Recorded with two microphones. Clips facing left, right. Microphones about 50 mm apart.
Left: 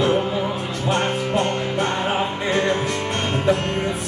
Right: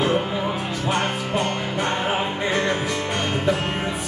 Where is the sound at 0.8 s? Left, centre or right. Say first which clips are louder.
Left 3 dB; centre.